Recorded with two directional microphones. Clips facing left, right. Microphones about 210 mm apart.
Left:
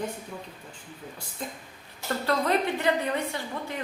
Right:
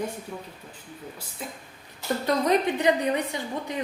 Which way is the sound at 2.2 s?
15° right (ahead or behind).